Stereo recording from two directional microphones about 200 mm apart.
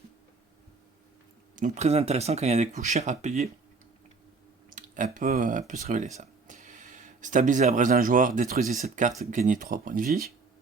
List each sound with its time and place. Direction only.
1.5 s speech: 40° right (ahead or behind)
4.7 s speech: 40° right (ahead or behind)